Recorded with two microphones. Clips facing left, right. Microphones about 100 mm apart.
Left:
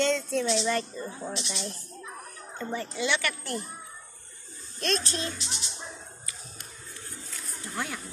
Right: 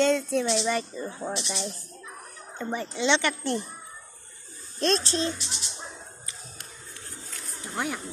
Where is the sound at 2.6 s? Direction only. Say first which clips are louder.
Right 2 dB; 20° right (ahead or behind).